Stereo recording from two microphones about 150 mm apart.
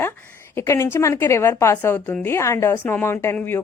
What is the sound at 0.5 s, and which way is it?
A woman's voice, 20° left (ahead or behind).